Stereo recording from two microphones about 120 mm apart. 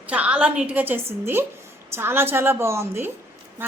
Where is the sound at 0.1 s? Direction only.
10° right (ahead or behind).